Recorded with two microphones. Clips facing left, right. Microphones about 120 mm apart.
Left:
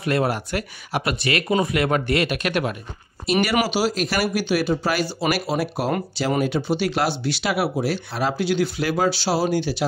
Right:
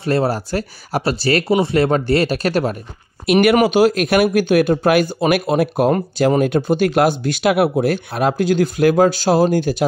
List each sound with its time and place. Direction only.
0.0 s speech: 30° right (ahead or behind)
3.3 s speech: 55° right (ahead or behind)